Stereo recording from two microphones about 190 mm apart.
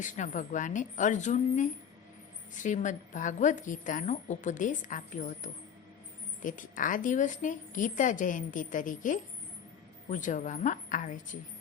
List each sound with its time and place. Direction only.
0.0 s a woman's voice: 40° left (ahead or behind)